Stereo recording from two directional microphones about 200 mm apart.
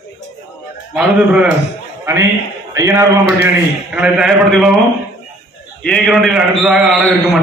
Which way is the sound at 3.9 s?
5° right (ahead or behind).